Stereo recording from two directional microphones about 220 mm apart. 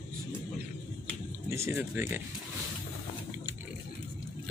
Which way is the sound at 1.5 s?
10° right (ahead or behind).